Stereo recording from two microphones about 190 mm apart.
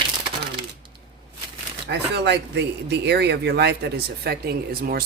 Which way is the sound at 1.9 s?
60° right (ahead or behind).